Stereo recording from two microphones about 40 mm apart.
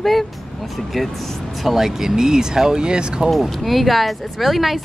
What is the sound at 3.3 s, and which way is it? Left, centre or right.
Speech, centre.